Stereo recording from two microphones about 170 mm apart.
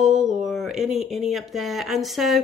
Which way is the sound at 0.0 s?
5° right (ahead or behind).